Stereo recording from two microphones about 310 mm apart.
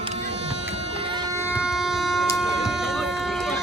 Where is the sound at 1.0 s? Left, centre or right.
Centre.